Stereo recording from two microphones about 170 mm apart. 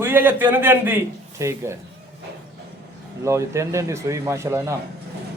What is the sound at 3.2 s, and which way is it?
A man's voice, 15° right (ahead or behind).